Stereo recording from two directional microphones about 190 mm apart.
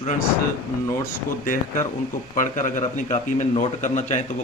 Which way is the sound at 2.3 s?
40° left (ahead or behind).